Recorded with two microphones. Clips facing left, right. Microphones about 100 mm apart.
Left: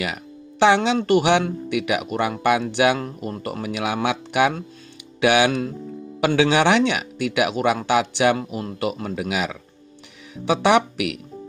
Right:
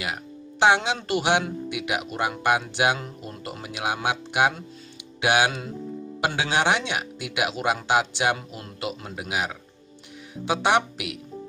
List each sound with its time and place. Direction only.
0.6 s speech: 65° left (ahead or behind)